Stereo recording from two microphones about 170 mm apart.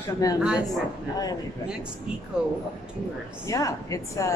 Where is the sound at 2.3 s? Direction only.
5° right (ahead or behind).